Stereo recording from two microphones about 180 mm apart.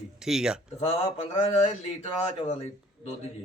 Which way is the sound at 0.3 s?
5° right (ahead or behind).